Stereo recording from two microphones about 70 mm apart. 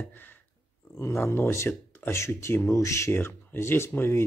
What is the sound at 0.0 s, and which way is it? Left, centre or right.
Speech, left.